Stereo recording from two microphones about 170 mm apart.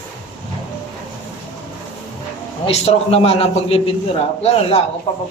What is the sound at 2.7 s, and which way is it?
A man's voice, 35° left (ahead or behind).